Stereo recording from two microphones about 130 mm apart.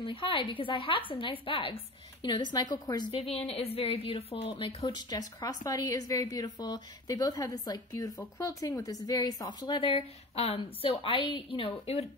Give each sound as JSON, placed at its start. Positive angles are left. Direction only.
{"t": 0.0, "sound": "a woman's voice", "side_deg": 40}
{"t": 3.2, "sound": "a woman's voice", "side_deg": 50}